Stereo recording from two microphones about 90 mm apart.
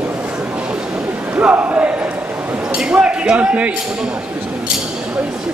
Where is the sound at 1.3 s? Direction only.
15° right (ahead or behind).